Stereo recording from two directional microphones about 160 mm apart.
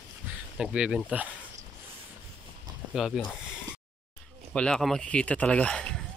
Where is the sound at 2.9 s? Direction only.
Centre (ahead or behind).